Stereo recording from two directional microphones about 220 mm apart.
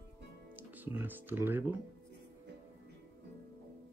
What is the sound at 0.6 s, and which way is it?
Typing, 10° right (ahead or behind).